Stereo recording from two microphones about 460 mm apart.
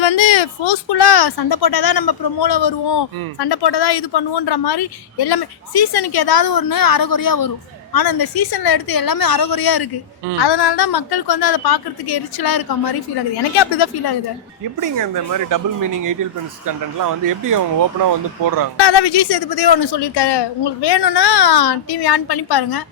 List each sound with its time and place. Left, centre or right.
0.0 s a woman's voice: left
14.9 s speech: right
18.8 s speech: left